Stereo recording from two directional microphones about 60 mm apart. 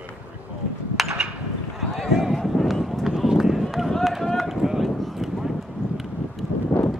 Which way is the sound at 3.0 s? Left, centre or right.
Centre.